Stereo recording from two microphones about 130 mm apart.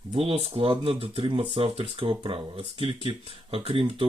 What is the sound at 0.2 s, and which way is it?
Speech, 45° right (ahead or behind).